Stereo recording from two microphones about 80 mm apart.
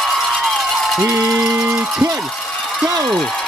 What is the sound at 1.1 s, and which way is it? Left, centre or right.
Speech, centre.